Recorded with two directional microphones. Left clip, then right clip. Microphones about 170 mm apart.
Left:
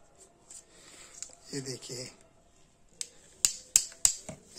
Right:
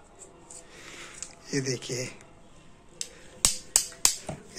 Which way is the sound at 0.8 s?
15° left (ahead or behind).